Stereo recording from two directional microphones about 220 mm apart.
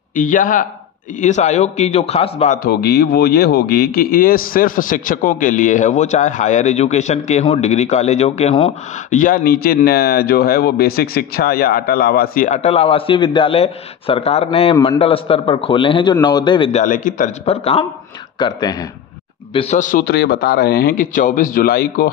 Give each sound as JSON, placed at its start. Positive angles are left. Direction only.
{"t": 0.1, "sound": "a man's voice", "side_deg": 40}
{"t": 19.5, "sound": "a man's voice", "side_deg": 30}